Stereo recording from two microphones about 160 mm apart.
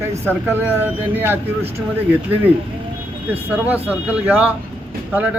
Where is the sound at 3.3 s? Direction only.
10° right (ahead or behind).